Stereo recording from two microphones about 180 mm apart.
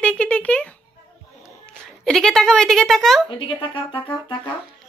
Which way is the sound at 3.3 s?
30° left (ahead or behind).